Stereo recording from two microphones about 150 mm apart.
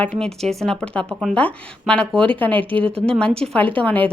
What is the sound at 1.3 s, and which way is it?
A woman's voice, 10° left (ahead or behind).